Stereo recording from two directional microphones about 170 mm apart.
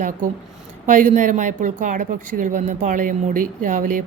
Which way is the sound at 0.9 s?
45° right (ahead or behind).